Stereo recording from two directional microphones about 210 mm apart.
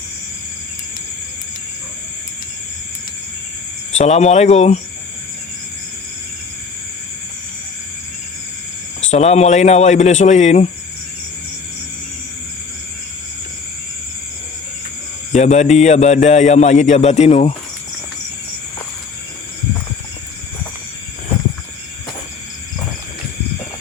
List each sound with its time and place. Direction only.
3.9 s a man's voice: 30° left (ahead or behind)
9.0 s a man's voice: 30° left (ahead or behind)
15.3 s a man's voice: 35° left (ahead or behind)